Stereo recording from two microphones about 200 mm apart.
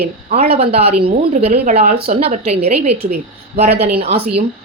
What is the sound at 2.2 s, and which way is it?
Speech, 30° right (ahead or behind).